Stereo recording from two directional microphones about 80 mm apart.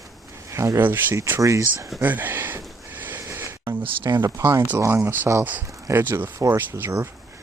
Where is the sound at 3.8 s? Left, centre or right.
Right.